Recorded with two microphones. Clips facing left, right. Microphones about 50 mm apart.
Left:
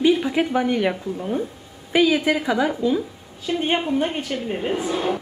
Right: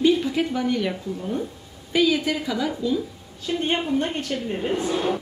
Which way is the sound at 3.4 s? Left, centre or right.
Centre.